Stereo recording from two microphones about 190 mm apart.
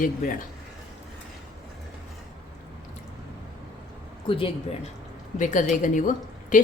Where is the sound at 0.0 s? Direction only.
45° left (ahead or behind).